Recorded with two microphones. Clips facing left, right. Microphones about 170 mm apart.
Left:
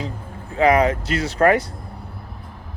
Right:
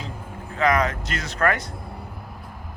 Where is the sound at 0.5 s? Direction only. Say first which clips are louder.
Left 5 dB; 30° left (ahead or behind).